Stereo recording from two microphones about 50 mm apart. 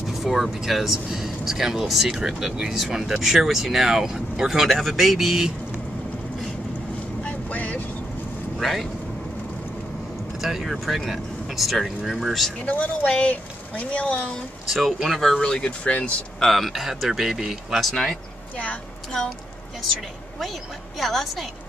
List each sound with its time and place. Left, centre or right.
0.1 s speech: centre
2.8 s speech: centre
7.2 s vehicle: left
8.5 s speech: centre
10.4 s speech: centre
12.6 s speech: left
14.7 s speech: centre; by 16.1 s left
16.3 s speech: centre
21.0 s speech: centre